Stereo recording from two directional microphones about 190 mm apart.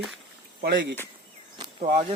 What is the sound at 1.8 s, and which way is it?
Speech, 30° right (ahead or behind).